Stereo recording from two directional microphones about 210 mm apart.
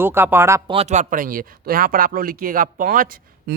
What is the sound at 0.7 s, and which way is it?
Speech, 30° right (ahead or behind).